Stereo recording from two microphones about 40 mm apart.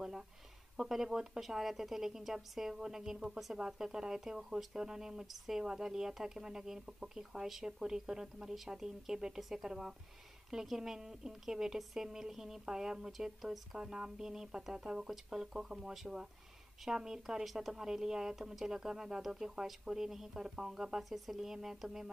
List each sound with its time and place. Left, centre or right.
0.7 s a woman's voice: centre
4.2 s a woman's voice: centre
5.2 s a woman's voice: centre
5.6 s a woman's voice: centre
13.7 s a woman's voice: centre